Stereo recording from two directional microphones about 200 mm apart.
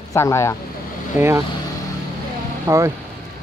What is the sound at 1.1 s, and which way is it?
Speech, 10° right (ahead or behind).